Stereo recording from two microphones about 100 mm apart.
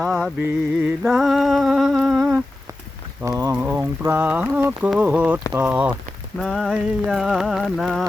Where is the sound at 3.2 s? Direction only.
35° right (ahead or behind).